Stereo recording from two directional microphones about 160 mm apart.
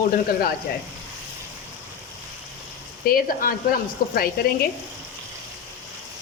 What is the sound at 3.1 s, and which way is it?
Speech, 65° left (ahead or behind).